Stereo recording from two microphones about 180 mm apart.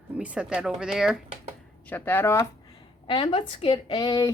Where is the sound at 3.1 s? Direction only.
30° left (ahead or behind).